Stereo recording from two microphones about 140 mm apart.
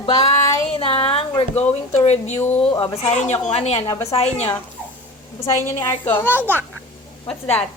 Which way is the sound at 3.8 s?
25° left (ahead or behind).